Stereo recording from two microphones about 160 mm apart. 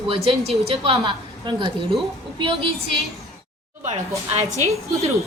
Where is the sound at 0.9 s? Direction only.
30° right (ahead or behind).